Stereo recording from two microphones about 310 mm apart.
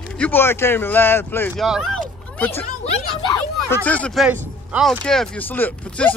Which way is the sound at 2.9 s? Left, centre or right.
Centre.